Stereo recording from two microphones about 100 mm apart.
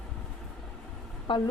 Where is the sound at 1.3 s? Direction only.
55° left (ahead or behind).